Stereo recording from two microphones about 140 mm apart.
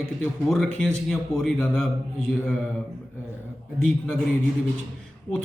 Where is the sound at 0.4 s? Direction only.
Centre (ahead or behind).